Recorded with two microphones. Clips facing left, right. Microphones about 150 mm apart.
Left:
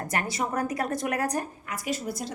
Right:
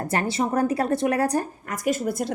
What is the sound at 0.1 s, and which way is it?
A woman's voice, 30° right (ahead or behind).